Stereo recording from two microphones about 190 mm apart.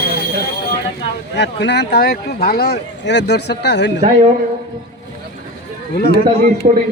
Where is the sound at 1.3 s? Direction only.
65° left (ahead or behind).